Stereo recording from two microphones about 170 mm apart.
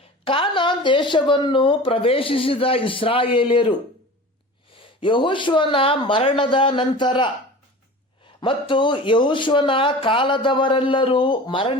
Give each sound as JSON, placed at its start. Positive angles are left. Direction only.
{"t": 0.3, "sound": "speech", "side_deg": 30}
{"t": 8.4, "sound": "speech", "side_deg": 30}